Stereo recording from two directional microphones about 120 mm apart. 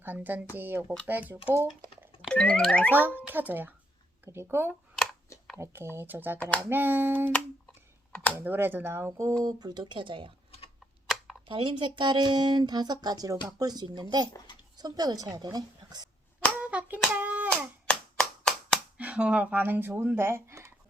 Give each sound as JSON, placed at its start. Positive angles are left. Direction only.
{"t": 0.0, "sound": "speech", "side_deg": -15}
{"t": 2.3, "sound": "boing", "side_deg": 10}
{"t": 2.9, "sound": "speech", "side_deg": -15}
{"t": 9.4, "sound": "speech", "side_deg": -35}
{"t": 11.0, "sound": "a sound", "side_deg": 0}
{"t": 11.4, "sound": "speech", "side_deg": -45}
{"t": 16.6, "sound": "hands", "side_deg": -15}
{"t": 17.8, "sound": "a sound", "side_deg": 5}
{"t": 18.9, "sound": "speech", "side_deg": -10}